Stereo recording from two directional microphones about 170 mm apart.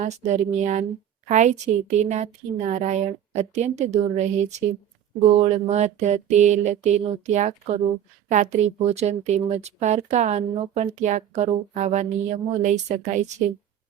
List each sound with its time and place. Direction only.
0.3 s a woman's voice: 45° right (ahead or behind)
5.3 s mantra: 40° right (ahead or behind)
8.3 s a woman's voice: 45° right (ahead or behind)